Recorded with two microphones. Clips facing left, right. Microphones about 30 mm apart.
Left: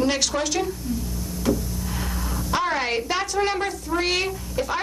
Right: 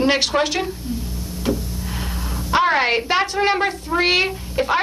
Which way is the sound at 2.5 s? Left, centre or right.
Right.